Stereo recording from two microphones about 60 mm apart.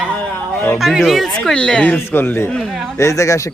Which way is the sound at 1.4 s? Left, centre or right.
Centre.